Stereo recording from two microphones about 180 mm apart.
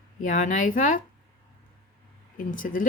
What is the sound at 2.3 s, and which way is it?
Speech, 50° left (ahead or behind).